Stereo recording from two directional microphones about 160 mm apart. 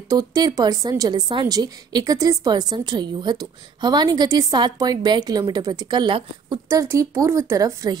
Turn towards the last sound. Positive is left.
turn(degrees=-20)  # may be behind; listen again after turning